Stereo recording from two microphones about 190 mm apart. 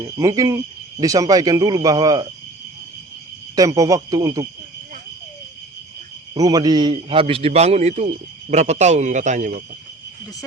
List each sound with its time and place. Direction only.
0.0 s speech: 20° right (ahead or behind)
3.5 s speech: 20° right (ahead or behind)
6.3 s a man's voice: 20° right (ahead or behind); by 9.6 s 40° right (ahead or behind)